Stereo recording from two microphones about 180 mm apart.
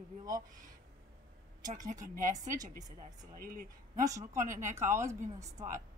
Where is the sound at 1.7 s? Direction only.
45° right (ahead or behind).